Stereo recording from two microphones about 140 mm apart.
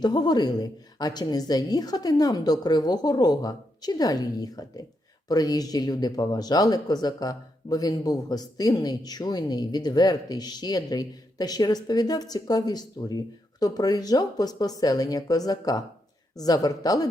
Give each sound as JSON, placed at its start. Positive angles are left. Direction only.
{"t": 0.0, "sound": "speech", "side_deg": 30}